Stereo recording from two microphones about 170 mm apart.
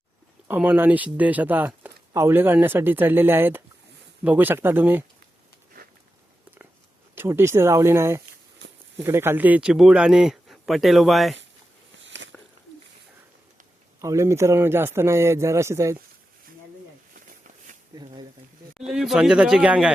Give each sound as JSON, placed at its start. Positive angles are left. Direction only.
{"t": 0.4, "sound": "speech", "side_deg": -10}
{"t": 7.2, "sound": "speech", "side_deg": -15}
{"t": 12.0, "sound": "a sound", "side_deg": -90}
{"t": 14.0, "sound": "speech", "side_deg": -15}
{"t": 17.9, "sound": "a sound", "side_deg": -25}
{"t": 18.8, "sound": "speech", "side_deg": -5}